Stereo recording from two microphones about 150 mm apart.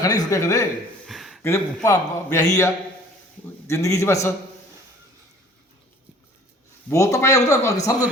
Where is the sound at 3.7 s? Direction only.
20° left (ahead or behind).